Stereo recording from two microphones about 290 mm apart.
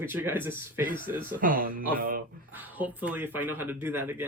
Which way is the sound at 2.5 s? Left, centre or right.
Centre.